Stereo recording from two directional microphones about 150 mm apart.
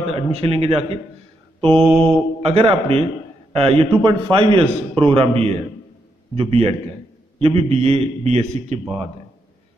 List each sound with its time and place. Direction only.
0.1 s a man's voice: 40° right (ahead or behind)
2.0 s mantra: 5° left (ahead or behind)
2.4 s a man's voice: 40° right (ahead or behind)